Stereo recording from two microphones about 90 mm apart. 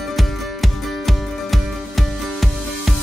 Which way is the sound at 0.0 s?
Centre (ahead or behind).